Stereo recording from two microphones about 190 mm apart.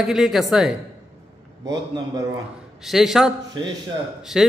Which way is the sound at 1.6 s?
20° right (ahead or behind).